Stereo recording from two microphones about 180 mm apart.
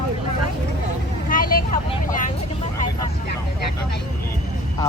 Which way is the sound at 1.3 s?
55° left (ahead or behind).